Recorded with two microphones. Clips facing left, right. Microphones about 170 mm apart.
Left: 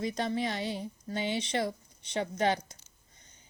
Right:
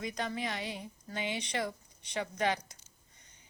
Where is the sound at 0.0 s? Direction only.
30° left (ahead or behind).